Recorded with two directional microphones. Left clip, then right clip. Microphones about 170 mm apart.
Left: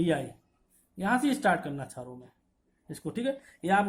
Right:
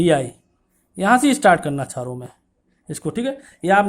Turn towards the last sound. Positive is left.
turn(degrees=-30)  # may be behind; listen again after turning